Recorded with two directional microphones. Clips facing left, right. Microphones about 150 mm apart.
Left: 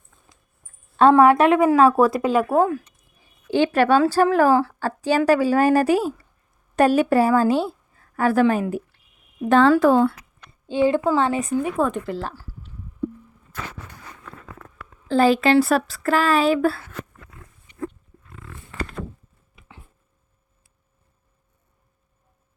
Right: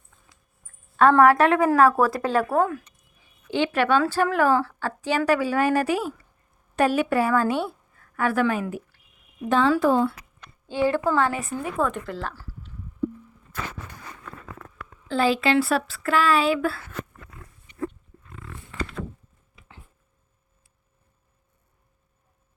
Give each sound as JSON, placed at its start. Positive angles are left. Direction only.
{"t": 1.2, "sound": "speech", "side_deg": 20}
{"t": 2.5, "sound": "speech", "side_deg": 30}
{"t": 3.5, "sound": "a woman's voice", "side_deg": 40}
{"t": 9.5, "sound": "speech", "side_deg": 65}
{"t": 10.7, "sound": "speech", "side_deg": 20}
{"t": 15.0, "sound": "speech", "side_deg": 40}